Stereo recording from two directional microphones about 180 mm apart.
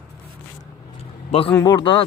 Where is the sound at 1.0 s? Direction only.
30° left (ahead or behind).